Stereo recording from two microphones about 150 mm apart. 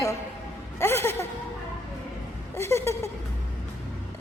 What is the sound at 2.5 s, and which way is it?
Speech, 15° left (ahead or behind).